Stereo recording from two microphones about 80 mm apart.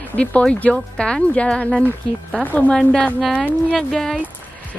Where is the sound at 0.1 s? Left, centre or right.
Centre.